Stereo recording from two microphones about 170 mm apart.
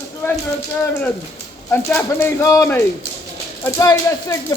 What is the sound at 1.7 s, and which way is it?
Speech, 10° left (ahead or behind).